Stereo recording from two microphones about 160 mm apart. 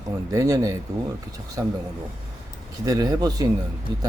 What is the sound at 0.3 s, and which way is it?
A man's voice, 20° right (ahead or behind).